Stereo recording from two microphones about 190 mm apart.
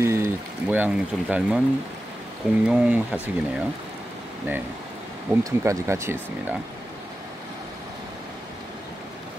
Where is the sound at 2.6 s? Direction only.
5° right (ahead or behind).